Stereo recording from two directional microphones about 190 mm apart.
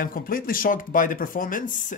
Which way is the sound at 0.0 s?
50° left (ahead or behind).